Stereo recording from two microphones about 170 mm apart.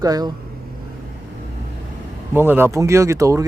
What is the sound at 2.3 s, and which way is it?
Speech, 15° right (ahead or behind).